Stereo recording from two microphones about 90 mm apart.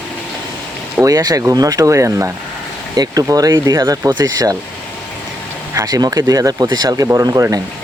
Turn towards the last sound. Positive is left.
turn(degrees=-40)  # may be behind; listen again after turning